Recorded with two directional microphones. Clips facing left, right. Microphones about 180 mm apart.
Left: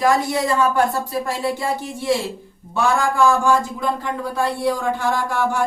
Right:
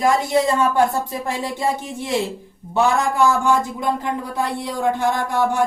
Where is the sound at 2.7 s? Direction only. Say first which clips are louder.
Right 1 dB; 20° right (ahead or behind).